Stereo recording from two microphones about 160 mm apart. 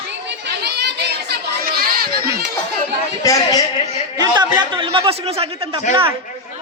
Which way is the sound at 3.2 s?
20° left (ahead or behind).